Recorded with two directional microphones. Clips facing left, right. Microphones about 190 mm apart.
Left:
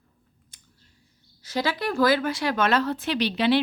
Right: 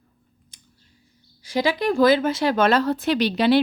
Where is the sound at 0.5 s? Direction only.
15° right (ahead or behind).